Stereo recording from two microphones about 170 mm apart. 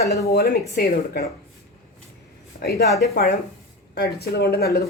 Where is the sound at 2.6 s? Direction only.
65° left (ahead or behind).